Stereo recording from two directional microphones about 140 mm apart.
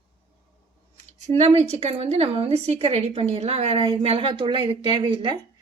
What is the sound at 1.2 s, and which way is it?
A woman's voice, 50° right (ahead or behind).